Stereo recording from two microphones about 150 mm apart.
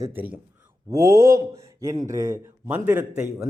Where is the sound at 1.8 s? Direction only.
25° right (ahead or behind).